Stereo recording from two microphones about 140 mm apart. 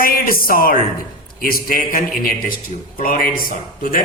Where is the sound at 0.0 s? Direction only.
90° left.